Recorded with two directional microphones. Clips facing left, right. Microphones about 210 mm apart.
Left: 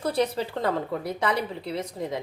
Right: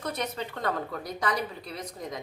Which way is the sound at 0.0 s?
30° left (ahead or behind).